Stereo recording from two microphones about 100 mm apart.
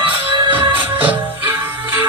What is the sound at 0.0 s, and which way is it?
Music, 50° right (ahead or behind).